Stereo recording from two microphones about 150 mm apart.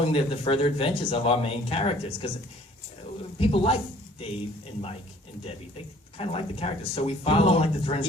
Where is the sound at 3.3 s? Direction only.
40° left (ahead or behind).